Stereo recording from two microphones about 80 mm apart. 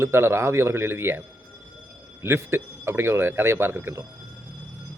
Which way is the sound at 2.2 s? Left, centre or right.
Right.